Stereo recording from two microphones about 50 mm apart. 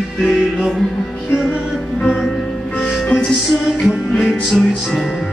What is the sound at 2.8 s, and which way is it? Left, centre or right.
Music, centre.